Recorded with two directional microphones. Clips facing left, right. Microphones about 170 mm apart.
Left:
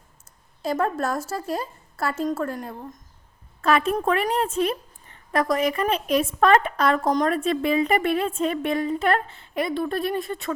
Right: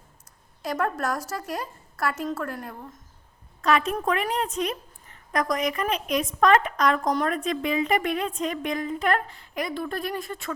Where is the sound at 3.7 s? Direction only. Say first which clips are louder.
Left 3 dB; 40° left (ahead or behind).